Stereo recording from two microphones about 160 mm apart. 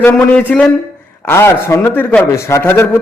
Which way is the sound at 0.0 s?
10° left (ahead or behind).